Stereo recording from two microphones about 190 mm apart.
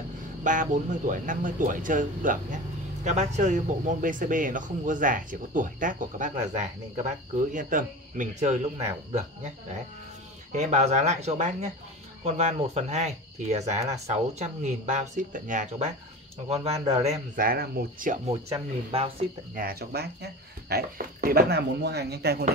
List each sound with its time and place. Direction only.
0.4 s speech: 45° right (ahead or behind)
10.5 s speech: 35° right (ahead or behind)
13.7 s speech: 15° right (ahead or behind)
14.0 s speech: 35° right (ahead or behind)
17.4 s speech: 50° right (ahead or behind); by 19.2 s 30° right (ahead or behind)
19.5 s speech: 50° right (ahead or behind)